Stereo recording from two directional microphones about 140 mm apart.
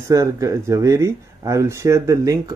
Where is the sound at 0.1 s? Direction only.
20° right (ahead or behind).